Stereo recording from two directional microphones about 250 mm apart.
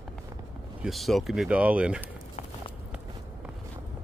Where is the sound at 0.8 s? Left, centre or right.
Centre.